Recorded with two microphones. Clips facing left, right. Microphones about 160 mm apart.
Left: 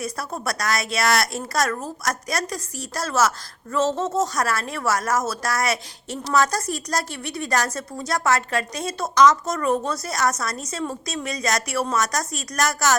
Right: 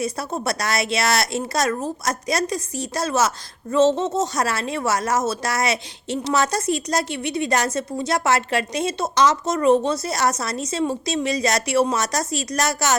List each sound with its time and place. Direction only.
0.4 s a woman's voice: 25° right (ahead or behind)